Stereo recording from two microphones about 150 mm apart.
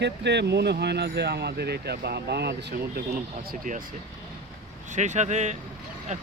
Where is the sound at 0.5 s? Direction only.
90° right.